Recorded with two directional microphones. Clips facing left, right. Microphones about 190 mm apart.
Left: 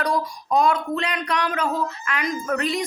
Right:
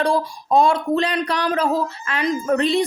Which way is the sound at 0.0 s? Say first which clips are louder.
Right 4 dB; 30° right (ahead or behind).